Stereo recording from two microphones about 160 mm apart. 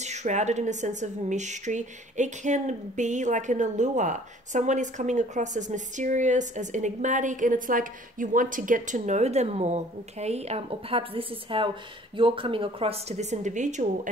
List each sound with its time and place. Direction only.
0.0 s a woman's voice: 45° right (ahead or behind)